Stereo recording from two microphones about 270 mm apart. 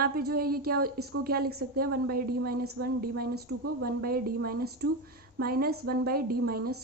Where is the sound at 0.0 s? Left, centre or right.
Right.